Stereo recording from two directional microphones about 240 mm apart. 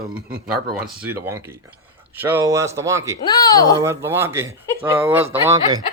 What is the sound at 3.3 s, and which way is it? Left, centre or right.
Speech, centre.